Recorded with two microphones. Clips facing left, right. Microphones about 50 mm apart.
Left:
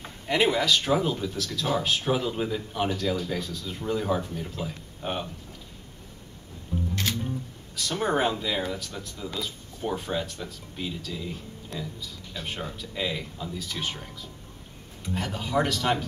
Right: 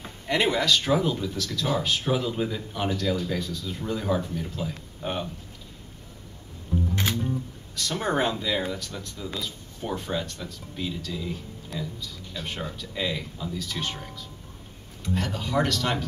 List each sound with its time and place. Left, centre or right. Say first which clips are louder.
0.0 s speech: left 1 dB; centre
6.7 s music: right 3 dB; centre
7.2 s speech: right 3 dB; centre
15.1 s speech: even; centre